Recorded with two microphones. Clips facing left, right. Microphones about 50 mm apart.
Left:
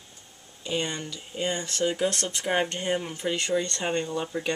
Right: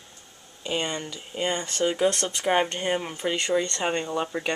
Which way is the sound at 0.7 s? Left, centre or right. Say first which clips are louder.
Right 1 dB; right.